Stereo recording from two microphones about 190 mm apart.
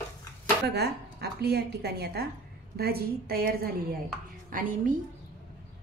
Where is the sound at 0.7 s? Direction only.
60° right (ahead or behind).